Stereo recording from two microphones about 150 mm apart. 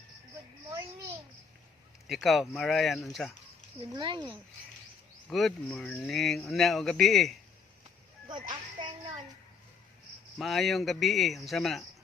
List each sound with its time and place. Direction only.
2.0 s speech: centre (ahead or behind)
3.9 s speech: 30° right (ahead or behind)
5.3 s speech: centre (ahead or behind)
10.3 s speech: centre (ahead or behind)